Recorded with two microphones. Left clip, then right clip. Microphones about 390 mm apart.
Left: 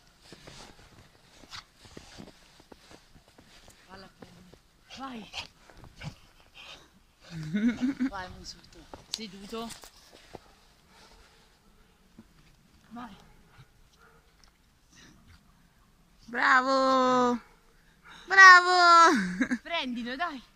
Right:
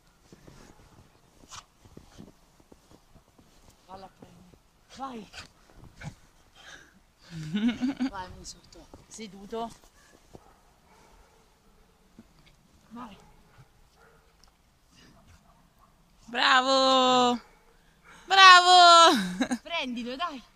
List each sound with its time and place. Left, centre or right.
4.8 s speech: centre
5.9 s dog: centre
7.2 s speech: centre
16.3 s a sound: centre